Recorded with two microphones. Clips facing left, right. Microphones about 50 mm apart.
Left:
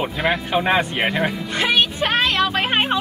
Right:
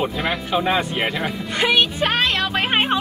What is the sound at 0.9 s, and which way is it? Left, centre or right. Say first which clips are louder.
Speech: left 2 dB; centre.